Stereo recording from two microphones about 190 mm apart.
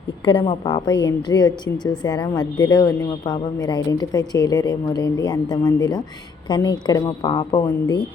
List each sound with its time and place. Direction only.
0.3 s a woman's voice: 25° left (ahead or behind)